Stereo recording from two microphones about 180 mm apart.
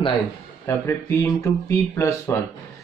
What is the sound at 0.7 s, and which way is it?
Speech, 15° left (ahead or behind).